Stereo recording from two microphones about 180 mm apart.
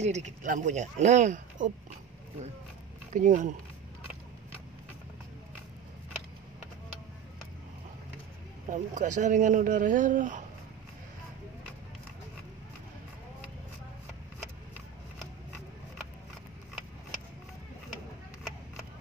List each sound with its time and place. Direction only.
0.0 s speech: 40° right (ahead or behind)
3.1 s speech: 45° right (ahead or behind)
8.6 s speech: 45° right (ahead or behind)